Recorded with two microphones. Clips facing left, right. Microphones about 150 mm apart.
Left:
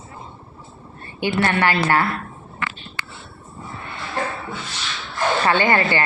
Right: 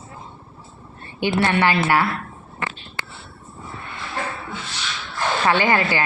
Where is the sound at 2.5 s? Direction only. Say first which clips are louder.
Even; 20° right (ahead or behind).